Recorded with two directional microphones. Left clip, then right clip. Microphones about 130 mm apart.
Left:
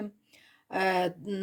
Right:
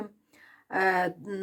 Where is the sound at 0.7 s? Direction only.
5° left (ahead or behind).